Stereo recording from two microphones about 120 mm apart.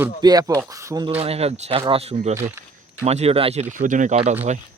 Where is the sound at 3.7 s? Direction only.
90° right; by 4.6 s 65° right (ahead or behind).